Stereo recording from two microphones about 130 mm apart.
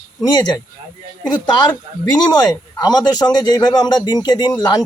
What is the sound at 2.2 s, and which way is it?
Speech, 30° left (ahead or behind).